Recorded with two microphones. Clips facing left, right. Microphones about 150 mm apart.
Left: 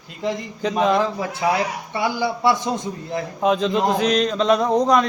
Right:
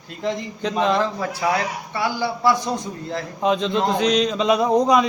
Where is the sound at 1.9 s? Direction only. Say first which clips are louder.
Left 1 dB; 20° left (ahead or behind).